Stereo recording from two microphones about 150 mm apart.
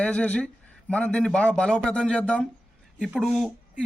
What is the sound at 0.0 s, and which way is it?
A man's voice, 5° left (ahead or behind).